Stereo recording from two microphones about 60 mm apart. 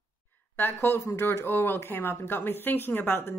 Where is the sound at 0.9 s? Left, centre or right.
Left.